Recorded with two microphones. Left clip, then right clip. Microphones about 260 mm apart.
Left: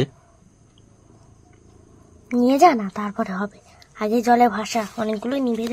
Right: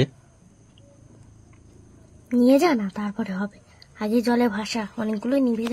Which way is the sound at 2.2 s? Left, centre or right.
Centre.